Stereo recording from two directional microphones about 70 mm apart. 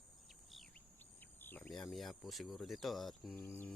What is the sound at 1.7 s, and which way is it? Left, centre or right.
Speech, centre.